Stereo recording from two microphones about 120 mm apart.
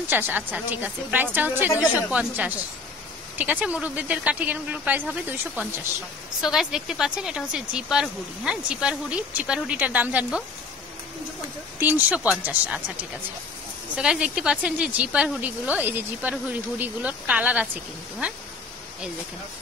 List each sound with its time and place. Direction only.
0.1 s speech: 15° right (ahead or behind)
11.8 s speech: 10° right (ahead or behind)